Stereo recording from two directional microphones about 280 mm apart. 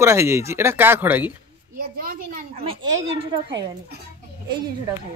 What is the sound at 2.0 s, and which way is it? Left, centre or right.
Speech, right.